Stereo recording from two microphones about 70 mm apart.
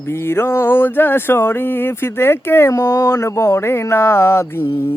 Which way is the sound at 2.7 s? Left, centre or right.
Left.